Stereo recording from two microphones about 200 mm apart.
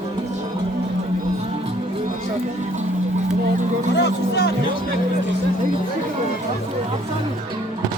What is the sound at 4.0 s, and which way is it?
Speech, 55° left (ahead or behind).